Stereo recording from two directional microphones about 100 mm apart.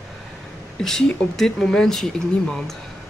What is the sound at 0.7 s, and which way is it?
Speech, 5° left (ahead or behind).